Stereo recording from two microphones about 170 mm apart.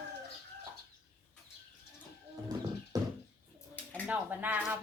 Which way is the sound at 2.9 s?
20° right (ahead or behind).